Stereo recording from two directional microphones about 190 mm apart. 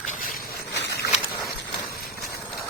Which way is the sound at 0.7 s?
65° left (ahead or behind).